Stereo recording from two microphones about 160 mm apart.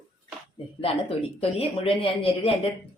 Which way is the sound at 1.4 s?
35° left (ahead or behind).